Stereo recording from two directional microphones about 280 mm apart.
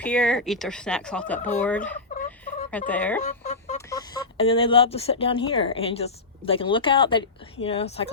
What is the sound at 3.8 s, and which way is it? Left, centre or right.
Speech, centre.